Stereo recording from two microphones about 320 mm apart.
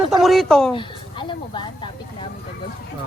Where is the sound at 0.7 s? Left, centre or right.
Centre.